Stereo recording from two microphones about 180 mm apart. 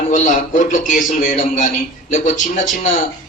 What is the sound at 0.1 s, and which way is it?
A man's voice, 45° left (ahead or behind).